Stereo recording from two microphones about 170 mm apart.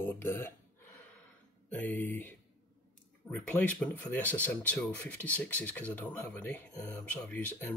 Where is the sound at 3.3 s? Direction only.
5° left (ahead or behind).